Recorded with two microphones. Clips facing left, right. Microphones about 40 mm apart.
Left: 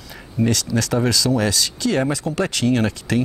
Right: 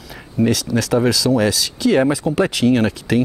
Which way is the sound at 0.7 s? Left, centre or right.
Centre.